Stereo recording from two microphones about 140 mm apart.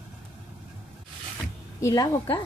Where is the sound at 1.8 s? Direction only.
25° left (ahead or behind).